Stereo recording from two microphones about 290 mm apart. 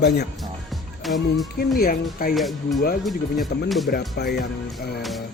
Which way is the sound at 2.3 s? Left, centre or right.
Centre.